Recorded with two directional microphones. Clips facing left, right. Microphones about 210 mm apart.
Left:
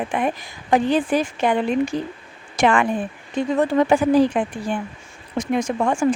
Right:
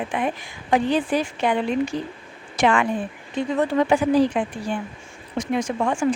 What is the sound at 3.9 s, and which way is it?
Speech, 50° left (ahead or behind).